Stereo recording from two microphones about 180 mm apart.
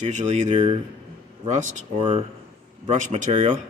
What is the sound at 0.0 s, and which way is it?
Speech, 40° right (ahead or behind).